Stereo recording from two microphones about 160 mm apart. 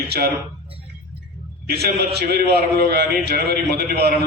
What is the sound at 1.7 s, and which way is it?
A man's voice, 90° right.